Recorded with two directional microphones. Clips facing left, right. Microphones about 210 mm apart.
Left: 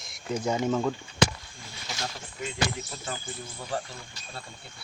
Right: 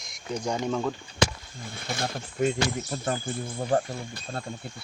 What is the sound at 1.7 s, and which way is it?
Speech, 55° right (ahead or behind).